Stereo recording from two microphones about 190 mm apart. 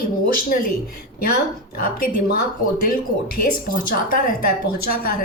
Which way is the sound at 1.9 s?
50° left (ahead or behind).